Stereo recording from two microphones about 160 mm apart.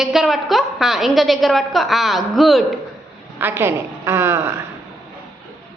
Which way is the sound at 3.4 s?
15° right (ahead or behind).